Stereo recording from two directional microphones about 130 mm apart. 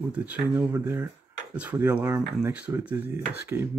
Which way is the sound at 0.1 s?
10° right (ahead or behind).